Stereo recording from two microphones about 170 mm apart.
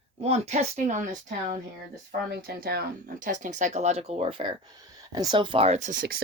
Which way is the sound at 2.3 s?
65° right (ahead or behind).